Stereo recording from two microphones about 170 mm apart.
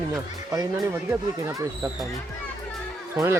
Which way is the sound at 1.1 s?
20° right (ahead or behind).